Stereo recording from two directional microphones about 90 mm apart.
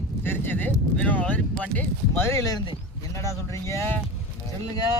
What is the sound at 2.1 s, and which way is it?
Speech, 30° left (ahead or behind).